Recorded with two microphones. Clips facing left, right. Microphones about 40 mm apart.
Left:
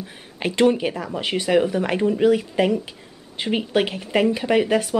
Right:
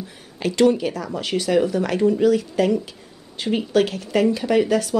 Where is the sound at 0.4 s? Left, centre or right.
Left.